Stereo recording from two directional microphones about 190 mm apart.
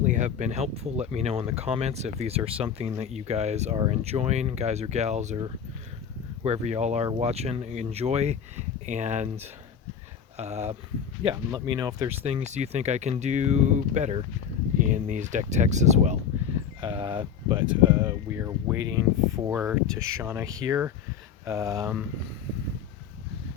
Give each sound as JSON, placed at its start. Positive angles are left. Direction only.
{"t": 0.0, "sound": "speech", "side_deg": -40}
{"t": 11.2, "sound": "speech", "side_deg": -25}
{"t": 12.2, "sound": "speech", "side_deg": -35}
{"t": 16.8, "sound": "speech", "side_deg": -25}